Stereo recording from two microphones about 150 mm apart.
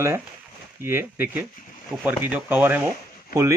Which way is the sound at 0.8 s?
15° right (ahead or behind).